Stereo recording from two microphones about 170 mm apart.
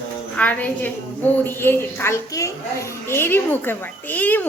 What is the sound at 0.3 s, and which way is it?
A woman's voice, 10° left (ahead or behind).